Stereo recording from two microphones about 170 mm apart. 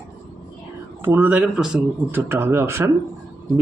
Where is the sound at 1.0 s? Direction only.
10° right (ahead or behind).